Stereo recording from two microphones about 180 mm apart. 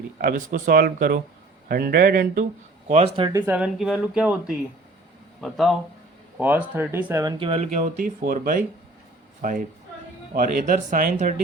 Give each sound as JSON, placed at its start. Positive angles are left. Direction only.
{"t": 0.2, "sound": "speech", "side_deg": -50}
{"t": 3.2, "sound": "speech", "side_deg": -15}
{"t": 7.3, "sound": "speech", "side_deg": -30}
{"t": 7.7, "sound": "speech", "side_deg": -50}